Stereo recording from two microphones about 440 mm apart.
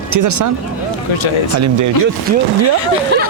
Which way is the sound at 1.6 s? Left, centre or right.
Right.